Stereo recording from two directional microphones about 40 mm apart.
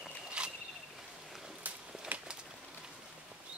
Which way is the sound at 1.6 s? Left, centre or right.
Right.